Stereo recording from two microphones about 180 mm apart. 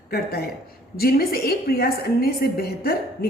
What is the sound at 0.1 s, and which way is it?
A woman's voice, 60° left (ahead or behind).